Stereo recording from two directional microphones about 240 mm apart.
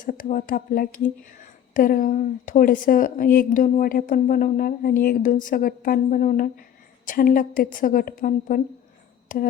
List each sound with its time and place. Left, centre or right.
0.0 s speech: left